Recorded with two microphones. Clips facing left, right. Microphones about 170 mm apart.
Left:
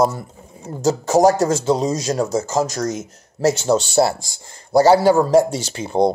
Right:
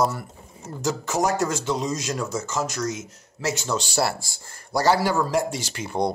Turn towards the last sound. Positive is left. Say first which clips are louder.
# left 7 dB
turn(degrees=30)  # may be behind; listen again after turning